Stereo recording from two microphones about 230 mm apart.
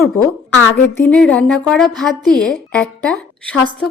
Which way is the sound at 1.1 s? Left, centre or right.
Centre.